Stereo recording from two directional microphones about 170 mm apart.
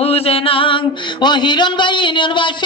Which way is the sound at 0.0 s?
35° left (ahead or behind).